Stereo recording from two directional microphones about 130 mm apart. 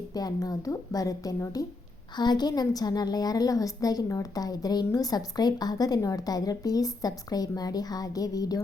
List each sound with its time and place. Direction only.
0.1 s a woman's voice: 30° left (ahead or behind)